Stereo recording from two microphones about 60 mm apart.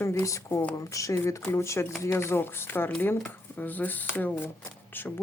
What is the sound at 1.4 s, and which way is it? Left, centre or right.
Speech, left.